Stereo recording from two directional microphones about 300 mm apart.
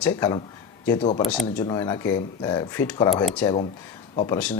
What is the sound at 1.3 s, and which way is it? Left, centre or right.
Speech, centre.